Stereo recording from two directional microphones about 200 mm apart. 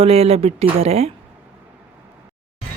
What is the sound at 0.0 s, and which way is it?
Speech, 30° right (ahead or behind).